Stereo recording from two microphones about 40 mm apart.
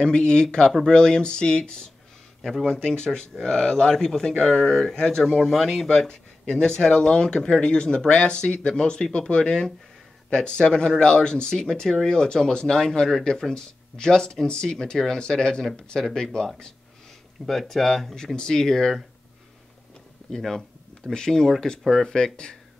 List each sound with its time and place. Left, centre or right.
0.0 s speech: left; by 4.9 s centre
4.9 s speech: centre
6.5 s speech: centre
17.5 s speech: centre
20.2 s speech: centre